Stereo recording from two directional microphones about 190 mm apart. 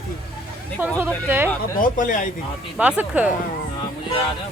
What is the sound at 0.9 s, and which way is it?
Speech, 10° right (ahead or behind).